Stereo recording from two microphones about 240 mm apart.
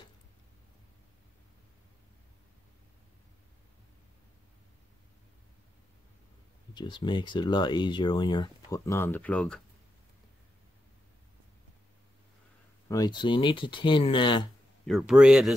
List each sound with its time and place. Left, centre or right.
6.7 s speech: centre
12.8 s speech: centre
14.9 s speech: centre